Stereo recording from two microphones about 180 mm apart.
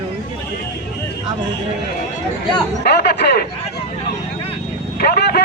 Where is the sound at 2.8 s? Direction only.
65° left (ahead or behind).